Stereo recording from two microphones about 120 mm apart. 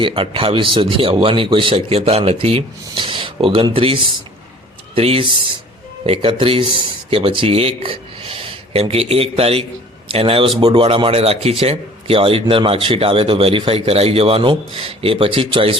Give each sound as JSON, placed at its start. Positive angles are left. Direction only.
{"t": 0.0, "sound": "a man's voice", "side_deg": -50}